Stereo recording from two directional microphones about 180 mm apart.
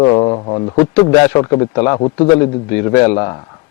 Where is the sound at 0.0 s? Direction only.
25° left (ahead or behind).